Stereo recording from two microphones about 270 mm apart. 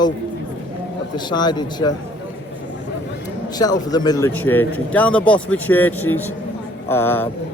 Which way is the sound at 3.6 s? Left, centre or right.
Centre.